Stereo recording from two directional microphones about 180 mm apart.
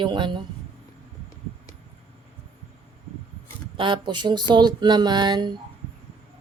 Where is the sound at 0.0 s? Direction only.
25° right (ahead or behind).